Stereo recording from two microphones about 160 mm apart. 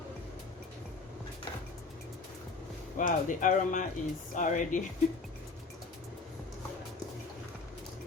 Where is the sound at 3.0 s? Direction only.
55° left (ahead or behind).